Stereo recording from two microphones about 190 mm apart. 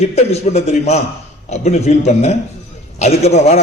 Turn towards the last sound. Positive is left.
turn(degrees=35)  # may be behind; listen again after turning